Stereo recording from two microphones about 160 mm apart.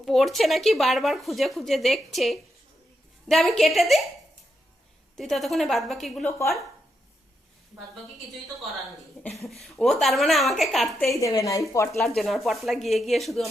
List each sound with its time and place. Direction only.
0.0 s speech: centre (ahead or behind)
5.1 s speech: centre (ahead or behind)
9.3 s speech: centre (ahead or behind)
11.2 s a woman's voice: 20° left (ahead or behind)
11.9 s speech: centre (ahead or behind)